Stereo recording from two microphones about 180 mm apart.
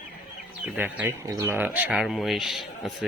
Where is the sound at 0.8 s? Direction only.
10° right (ahead or behind).